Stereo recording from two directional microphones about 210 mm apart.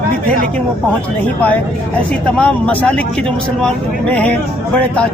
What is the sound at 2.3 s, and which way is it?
Speech, 5° left (ahead or behind).